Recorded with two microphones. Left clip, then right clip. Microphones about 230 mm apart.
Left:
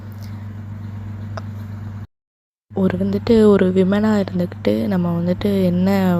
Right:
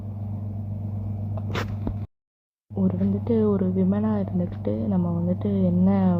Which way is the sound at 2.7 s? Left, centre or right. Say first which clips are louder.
Left 7 dB; left.